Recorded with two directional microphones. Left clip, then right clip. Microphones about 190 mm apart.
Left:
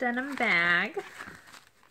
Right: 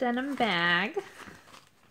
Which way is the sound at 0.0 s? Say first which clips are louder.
Even; 50° right (ahead or behind).